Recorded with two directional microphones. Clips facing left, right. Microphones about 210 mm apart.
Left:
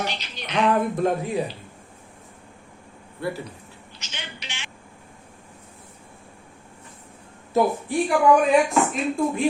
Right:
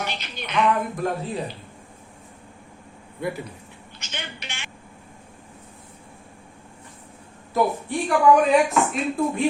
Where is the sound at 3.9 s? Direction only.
55° right (ahead or behind).